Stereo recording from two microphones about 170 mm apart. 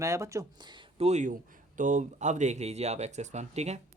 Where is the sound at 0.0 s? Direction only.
20° right (ahead or behind).